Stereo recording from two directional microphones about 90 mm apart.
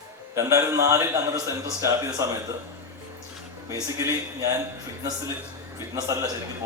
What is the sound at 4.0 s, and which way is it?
Speech, 35° right (ahead or behind).